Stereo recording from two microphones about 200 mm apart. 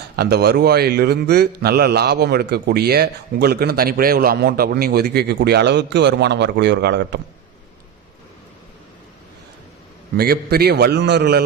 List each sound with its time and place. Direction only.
0.2 s a man's voice: 55° right (ahead or behind)
10.2 s a man's voice: 50° right (ahead or behind)